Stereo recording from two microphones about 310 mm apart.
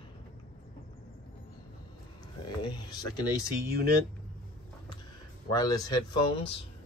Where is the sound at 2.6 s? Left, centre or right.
Centre.